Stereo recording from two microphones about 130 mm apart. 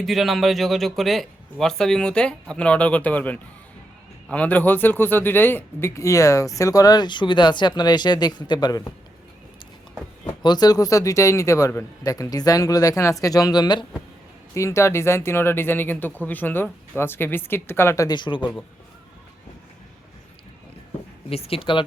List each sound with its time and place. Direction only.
0.0 s a man's voice: centre (ahead or behind); by 8.9 s 30° left (ahead or behind)
10.4 s a man's voice: 30° left (ahead or behind)
14.5 s speech: 20° left (ahead or behind)
21.2 s speech: 50° left (ahead or behind)